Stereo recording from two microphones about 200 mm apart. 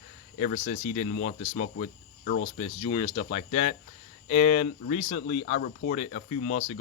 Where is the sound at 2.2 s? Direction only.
55° left (ahead or behind).